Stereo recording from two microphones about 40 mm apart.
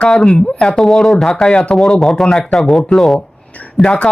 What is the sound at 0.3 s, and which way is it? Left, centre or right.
Speech, left.